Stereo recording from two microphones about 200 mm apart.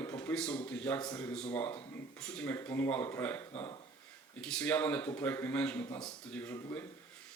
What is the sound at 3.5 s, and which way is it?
Speech, 30° left (ahead or behind).